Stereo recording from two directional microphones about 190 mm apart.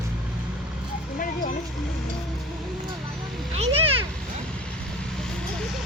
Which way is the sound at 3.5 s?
35° right (ahead or behind).